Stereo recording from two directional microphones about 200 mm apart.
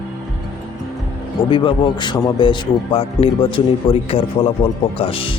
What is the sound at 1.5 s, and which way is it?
Speech, 25° left (ahead or behind).